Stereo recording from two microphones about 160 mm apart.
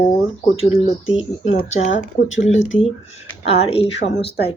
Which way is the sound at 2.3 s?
45° left (ahead or behind).